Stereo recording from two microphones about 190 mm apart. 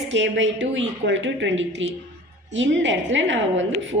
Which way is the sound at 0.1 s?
70° right (ahead or behind).